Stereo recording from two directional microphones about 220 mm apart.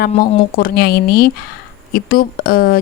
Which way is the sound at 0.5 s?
40° left (ahead or behind).